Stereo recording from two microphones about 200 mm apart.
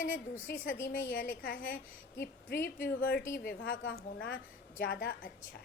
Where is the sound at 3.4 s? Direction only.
50° left (ahead or behind).